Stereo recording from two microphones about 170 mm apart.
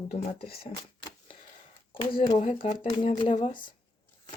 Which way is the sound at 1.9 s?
30° left (ahead or behind).